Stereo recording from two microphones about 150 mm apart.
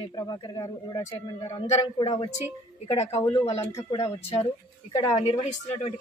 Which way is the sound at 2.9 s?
45° left (ahead or behind).